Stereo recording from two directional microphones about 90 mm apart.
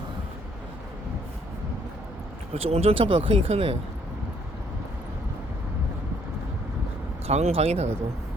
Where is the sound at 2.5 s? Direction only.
75° right (ahead or behind).